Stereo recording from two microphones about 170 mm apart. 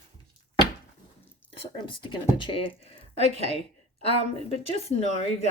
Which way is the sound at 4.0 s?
35° left (ahead or behind).